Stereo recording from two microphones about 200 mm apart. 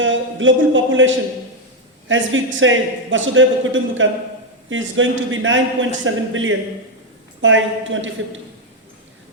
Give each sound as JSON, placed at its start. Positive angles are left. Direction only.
{"t": 0.0, "sound": "a man's voice", "side_deg": -70}